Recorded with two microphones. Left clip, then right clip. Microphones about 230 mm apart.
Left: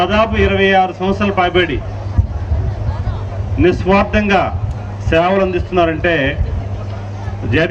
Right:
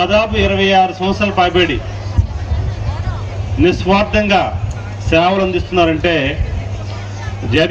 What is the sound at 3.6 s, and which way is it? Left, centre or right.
A man's voice, right.